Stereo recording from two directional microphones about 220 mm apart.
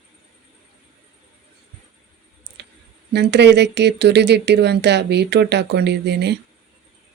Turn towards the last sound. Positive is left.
turn(degrees=-50)  # may be behind; listen again after turning